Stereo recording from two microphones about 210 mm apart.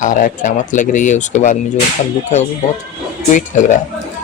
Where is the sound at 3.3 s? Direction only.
35° left (ahead or behind).